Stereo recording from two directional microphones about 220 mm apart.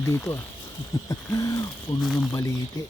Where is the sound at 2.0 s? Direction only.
Centre (ahead or behind).